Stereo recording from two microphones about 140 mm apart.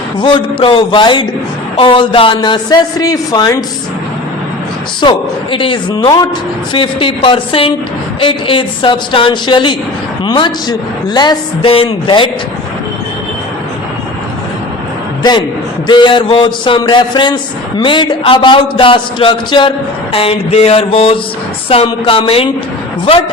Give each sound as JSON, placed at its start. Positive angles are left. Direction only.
{"t": 0.2, "sound": "a man's voice", "side_deg": 35}
{"t": 4.9, "sound": "a man's voice", "side_deg": 35}
{"t": 15.2, "sound": "a man's voice", "side_deg": 30}
{"t": 20.1, "sound": "mantra", "side_deg": 45}
{"t": 21.8, "sound": "a man's voice", "side_deg": 40}